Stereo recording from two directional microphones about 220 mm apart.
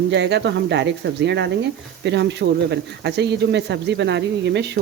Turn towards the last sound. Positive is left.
turn(degrees=-50)  # may be behind; listen again after turning